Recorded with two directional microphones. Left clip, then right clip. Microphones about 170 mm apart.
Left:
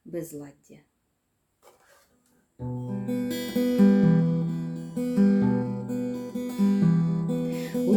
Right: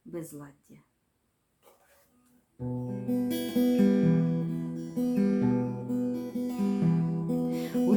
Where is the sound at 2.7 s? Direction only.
35° left (ahead or behind).